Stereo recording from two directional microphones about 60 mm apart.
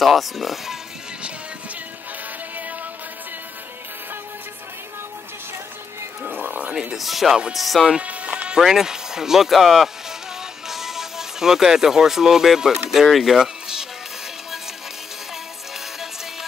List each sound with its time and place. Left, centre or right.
0.0 s speech: centre
6.2 s cat: right
6.7 s speech: centre
7.0 s speech: centre
7.9 s music: right
8.5 s speech: centre